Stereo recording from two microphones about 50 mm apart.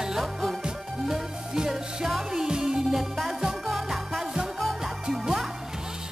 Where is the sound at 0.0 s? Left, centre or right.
Centre.